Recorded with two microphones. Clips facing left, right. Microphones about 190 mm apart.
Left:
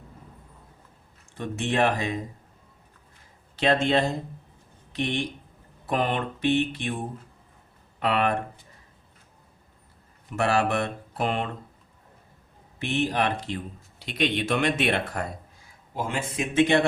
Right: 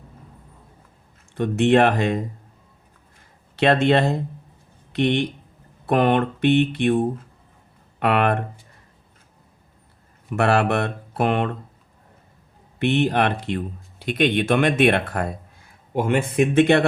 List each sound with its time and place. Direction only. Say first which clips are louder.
1.4 s speech: right 8 dB; 65° right (ahead or behind)
3.5 s speech: right 5 dB; 65° right (ahead or behind)
10.3 s speech: right 4 dB; 60° right (ahead or behind)
12.8 s speech: right 6 dB; 60° right (ahead or behind)